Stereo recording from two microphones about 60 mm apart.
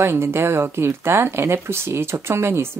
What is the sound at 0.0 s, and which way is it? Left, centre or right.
Speech, right.